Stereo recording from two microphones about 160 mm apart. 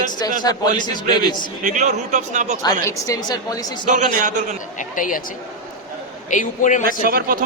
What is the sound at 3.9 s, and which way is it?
Speech, 55° right (ahead or behind).